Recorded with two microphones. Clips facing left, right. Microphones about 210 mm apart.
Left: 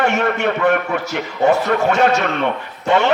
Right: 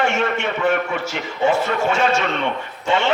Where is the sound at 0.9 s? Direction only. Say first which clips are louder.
Left 3 dB; 40° left (ahead or behind).